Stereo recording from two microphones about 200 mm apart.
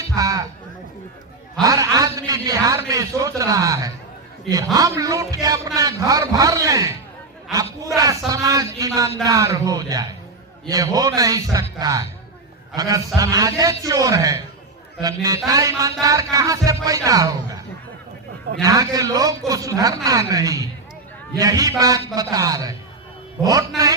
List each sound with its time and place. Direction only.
0.2 s a sound: 20° right (ahead or behind)
1.6 s a man's voice: 20° right (ahead or behind)
18.6 s a man's voice: 15° right (ahead or behind)